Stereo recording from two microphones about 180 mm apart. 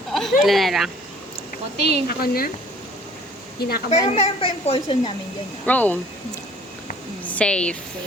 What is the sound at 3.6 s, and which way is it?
Speech, 60° left (ahead or behind).